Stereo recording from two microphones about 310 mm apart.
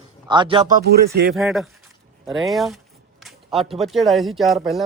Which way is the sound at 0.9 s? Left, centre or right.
Right.